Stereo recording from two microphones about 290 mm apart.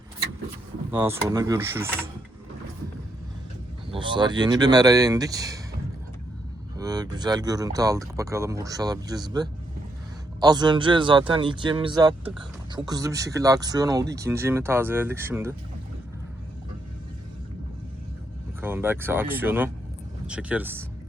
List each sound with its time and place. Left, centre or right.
0.9 s speech: centre
3.9 s speech: centre
6.7 s speech: centre
18.6 s speech: centre